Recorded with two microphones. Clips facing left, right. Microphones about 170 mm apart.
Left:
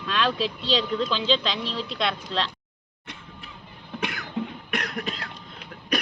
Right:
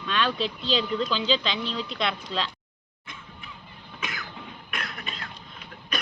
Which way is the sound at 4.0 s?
65° left (ahead or behind).